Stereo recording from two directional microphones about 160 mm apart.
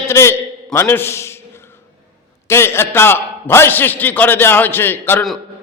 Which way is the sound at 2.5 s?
15° left (ahead or behind).